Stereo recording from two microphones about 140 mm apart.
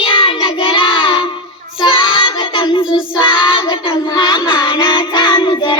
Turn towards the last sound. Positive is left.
turn(degrees=35)  # may be behind; listen again after turning